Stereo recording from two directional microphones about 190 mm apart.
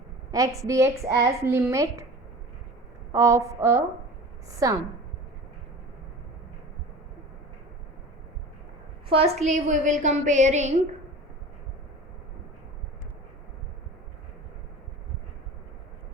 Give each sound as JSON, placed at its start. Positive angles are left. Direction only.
{"t": 0.3, "sound": "a woman's voice", "side_deg": -20}
{"t": 3.1, "sound": "a woman's voice", "side_deg": -15}
{"t": 9.0, "sound": "a woman's voice", "side_deg": -30}